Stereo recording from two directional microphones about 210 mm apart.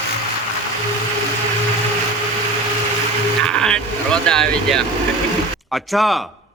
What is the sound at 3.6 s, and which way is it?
Speech, 5° left (ahead or behind).